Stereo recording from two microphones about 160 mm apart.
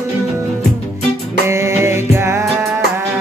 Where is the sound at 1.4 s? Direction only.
15° right (ahead or behind).